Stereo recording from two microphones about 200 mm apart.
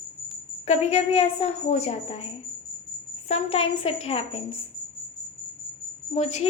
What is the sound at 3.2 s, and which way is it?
A woman's voice, 30° left (ahead or behind).